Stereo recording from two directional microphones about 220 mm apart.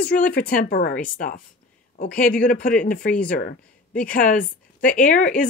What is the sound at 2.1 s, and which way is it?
Speech, 5° left (ahead or behind).